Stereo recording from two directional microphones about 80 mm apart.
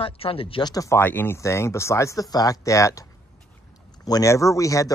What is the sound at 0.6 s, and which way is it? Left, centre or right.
Speech, left.